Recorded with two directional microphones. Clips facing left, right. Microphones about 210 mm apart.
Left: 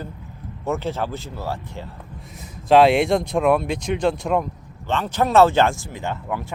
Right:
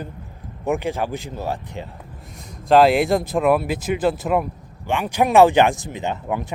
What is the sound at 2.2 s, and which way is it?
Speech, centre (ahead or behind).